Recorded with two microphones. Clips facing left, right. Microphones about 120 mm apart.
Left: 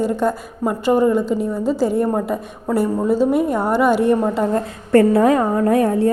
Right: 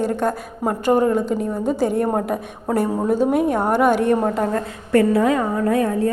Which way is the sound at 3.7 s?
50° right (ahead or behind).